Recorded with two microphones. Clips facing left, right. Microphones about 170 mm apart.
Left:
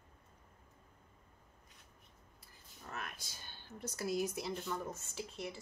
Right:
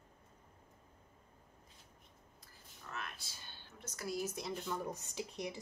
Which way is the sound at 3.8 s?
30° left (ahead or behind).